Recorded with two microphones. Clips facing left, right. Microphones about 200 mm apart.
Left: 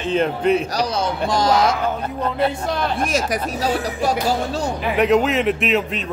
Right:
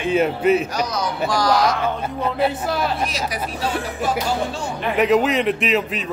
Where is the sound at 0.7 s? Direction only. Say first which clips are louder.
Left 2 dB; 30° left (ahead or behind).